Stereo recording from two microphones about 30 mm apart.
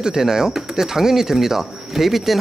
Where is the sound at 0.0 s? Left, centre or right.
Centre.